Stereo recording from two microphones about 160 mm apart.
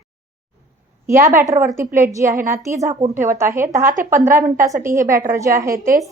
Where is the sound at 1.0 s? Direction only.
15° right (ahead or behind).